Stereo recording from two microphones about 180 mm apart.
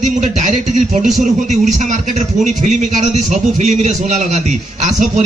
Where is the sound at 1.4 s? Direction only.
40° right (ahead or behind).